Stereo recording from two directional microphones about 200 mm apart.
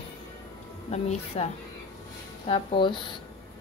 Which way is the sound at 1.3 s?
30° left (ahead or behind).